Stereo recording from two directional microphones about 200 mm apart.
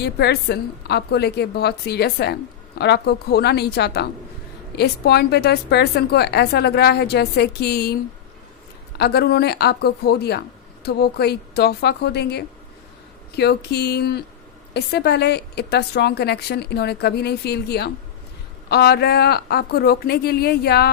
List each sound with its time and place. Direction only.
0.0 s a woman's voice: 55° left (ahead or behind)
9.0 s a woman's voice: 55° left (ahead or behind)